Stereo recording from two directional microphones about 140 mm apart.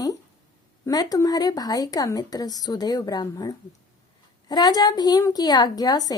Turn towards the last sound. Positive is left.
turn(degrees=30)  # may be behind; listen again after turning